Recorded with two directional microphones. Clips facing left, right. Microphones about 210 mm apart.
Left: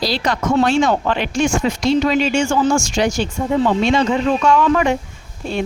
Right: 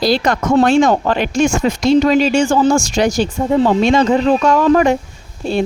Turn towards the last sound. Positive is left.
turn(degrees=-30)  # may be behind; listen again after turning